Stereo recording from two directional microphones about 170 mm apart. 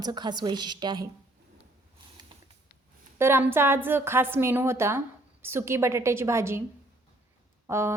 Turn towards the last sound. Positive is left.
turn(degrees=-15)  # may be behind; listen again after turning